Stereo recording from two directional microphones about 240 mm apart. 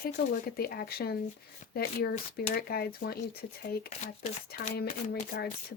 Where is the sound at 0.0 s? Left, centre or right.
Left.